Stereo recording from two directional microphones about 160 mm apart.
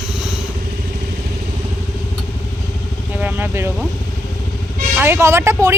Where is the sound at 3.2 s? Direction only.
10° right (ahead or behind).